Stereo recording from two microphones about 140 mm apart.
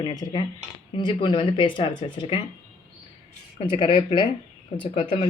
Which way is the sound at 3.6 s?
35° left (ahead or behind).